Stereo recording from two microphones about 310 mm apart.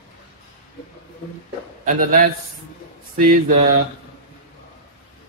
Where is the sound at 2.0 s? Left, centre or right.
Right.